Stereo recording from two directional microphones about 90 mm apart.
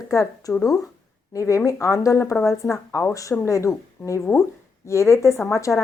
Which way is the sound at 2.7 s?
35° left (ahead or behind).